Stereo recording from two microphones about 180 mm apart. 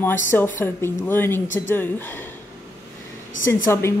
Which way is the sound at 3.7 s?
15° left (ahead or behind).